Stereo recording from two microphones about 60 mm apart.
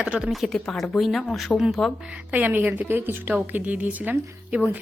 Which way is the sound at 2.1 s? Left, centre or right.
Right.